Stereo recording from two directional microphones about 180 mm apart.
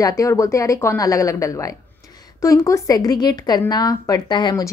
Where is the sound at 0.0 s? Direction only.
15° left (ahead or behind).